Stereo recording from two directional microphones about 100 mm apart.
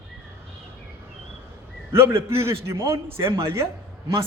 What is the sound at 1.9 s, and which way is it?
A man's voice, 25° right (ahead or behind).